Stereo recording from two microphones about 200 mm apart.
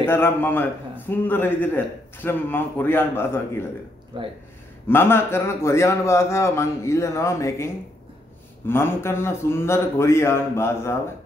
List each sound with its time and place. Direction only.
0.0 s a man's voice: 10° left (ahead or behind)
4.1 s speech: 25° right (ahead or behind)
4.8 s a man's voice: 10° left (ahead or behind)